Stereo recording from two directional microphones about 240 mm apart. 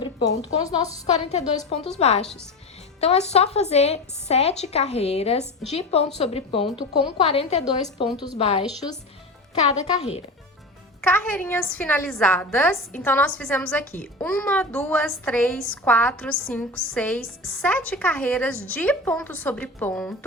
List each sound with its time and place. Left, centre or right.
0.0 s a woman's voice: left
9.8 s a woman's voice: left
11.1 s a woman's voice: centre